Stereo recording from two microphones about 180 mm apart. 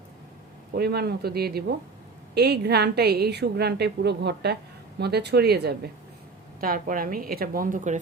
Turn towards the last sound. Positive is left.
turn(degrees=-45)  # may be behind; listen again after turning